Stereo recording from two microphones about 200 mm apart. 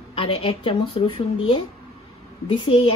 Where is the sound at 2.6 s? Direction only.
25° left (ahead or behind).